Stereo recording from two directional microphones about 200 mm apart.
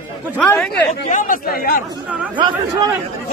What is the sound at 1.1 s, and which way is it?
Speech, 40° left (ahead or behind).